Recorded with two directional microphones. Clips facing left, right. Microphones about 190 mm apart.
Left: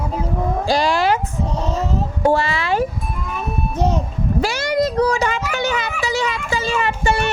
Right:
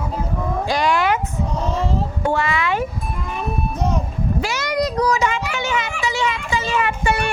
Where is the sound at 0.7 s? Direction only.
30° left (ahead or behind).